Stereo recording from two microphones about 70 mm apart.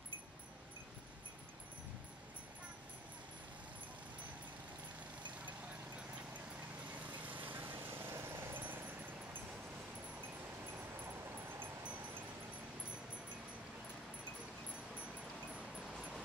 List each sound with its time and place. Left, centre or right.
7.2 s vehicle: right
15.5 s vehicle: centre